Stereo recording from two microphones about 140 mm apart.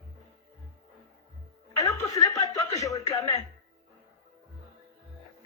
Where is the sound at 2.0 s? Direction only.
25° left (ahead or behind).